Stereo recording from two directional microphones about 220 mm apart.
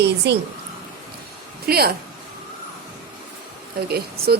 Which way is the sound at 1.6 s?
45° right (ahead or behind).